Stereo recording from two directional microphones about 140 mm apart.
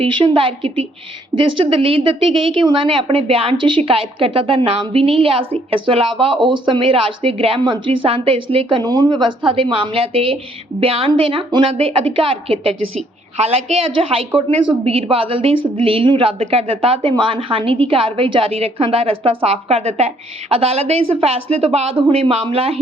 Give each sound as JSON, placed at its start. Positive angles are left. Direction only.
{"t": 0.0, "sound": "a woman's voice", "side_deg": -40}